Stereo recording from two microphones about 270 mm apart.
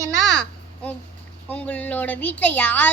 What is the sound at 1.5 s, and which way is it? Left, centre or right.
Speech, centre.